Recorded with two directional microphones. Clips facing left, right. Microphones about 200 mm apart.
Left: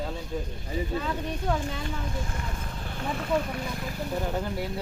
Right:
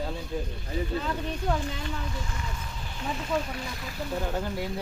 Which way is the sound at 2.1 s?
50° left (ahead or behind).